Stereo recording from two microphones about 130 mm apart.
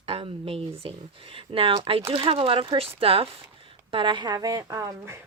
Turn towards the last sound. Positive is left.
turn(degrees=-25)  # may be behind; listen again after turning